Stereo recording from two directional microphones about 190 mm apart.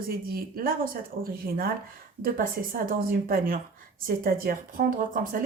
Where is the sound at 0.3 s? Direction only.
50° right (ahead or behind).